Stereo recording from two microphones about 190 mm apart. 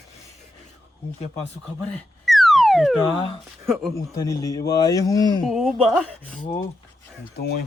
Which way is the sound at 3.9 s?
15° left (ahead or behind).